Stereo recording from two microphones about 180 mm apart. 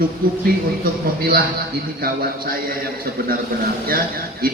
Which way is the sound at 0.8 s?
55° right (ahead or behind).